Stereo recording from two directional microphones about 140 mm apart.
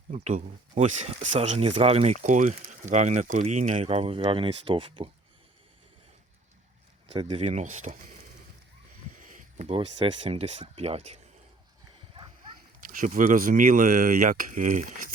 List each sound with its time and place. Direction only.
0.1 s speech: 55° right (ahead or behind)
2.2 s speech: 60° right (ahead or behind); by 5.0 s 40° right (ahead or behind)
7.1 s speech: 40° right (ahead or behind); by 7.9 s 55° right (ahead or behind)
9.1 s a sound: 65° right (ahead or behind)
9.6 s speech: 45° right (ahead or behind)
13.0 s speech: 65° right (ahead or behind)